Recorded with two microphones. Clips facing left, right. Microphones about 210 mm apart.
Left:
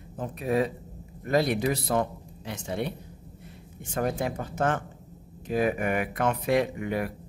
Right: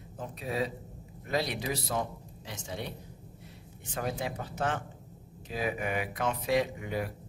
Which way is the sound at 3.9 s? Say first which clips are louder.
Left 6 dB; 50° left (ahead or behind).